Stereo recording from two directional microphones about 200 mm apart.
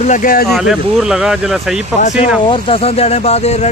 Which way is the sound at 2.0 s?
35° left (ahead or behind).